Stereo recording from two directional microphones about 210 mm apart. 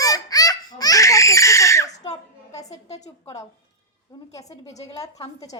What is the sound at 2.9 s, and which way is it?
Speech, 35° left (ahead or behind).